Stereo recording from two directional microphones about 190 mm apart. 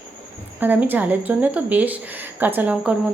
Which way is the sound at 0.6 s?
10° right (ahead or behind).